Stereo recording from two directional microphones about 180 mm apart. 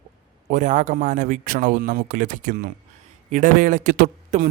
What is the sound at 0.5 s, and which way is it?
Speech, 45° right (ahead or behind).